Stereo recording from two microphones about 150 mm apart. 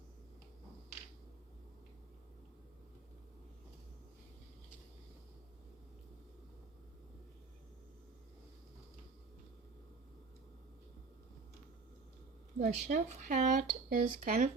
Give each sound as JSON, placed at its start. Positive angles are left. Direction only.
{"t": 12.5, "sound": "speech", "side_deg": -55}